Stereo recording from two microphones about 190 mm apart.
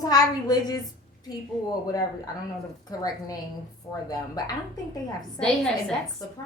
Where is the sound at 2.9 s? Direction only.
20° left (ahead or behind).